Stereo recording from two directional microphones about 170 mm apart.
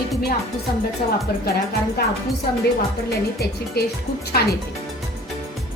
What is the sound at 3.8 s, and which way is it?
Speech, 70° left (ahead or behind).